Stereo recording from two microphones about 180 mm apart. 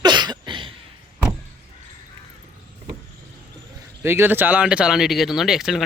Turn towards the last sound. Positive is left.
turn(degrees=0)  # may be behind; listen again after turning